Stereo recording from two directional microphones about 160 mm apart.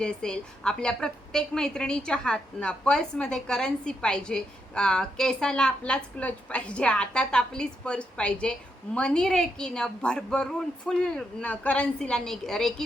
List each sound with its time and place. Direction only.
0.0 s a woman's voice: 5° left (ahead or behind)